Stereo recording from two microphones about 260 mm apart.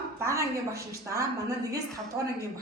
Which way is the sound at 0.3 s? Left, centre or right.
Centre.